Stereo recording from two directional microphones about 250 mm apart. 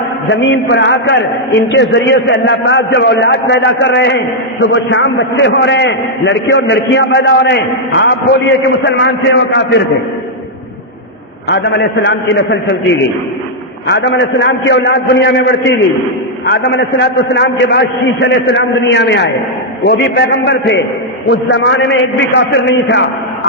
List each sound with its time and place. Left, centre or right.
0.3 s a man's voice: left
11.4 s a man's voice: left
13.8 s a man's voice: left
16.5 s a man's voice: left